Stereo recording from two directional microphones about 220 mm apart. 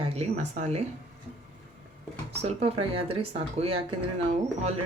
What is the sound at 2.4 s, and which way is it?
Speech, 25° right (ahead or behind).